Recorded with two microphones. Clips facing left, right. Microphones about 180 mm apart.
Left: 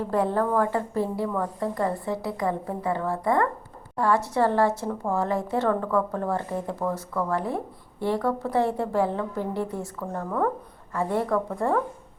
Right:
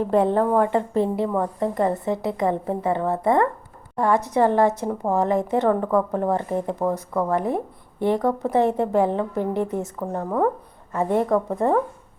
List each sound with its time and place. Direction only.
0.0 s a woman's voice: 20° right (ahead or behind)